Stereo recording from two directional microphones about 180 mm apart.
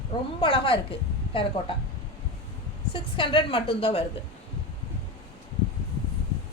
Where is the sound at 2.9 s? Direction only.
25° left (ahead or behind).